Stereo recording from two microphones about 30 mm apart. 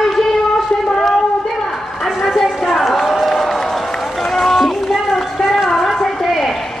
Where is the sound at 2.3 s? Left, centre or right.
Centre.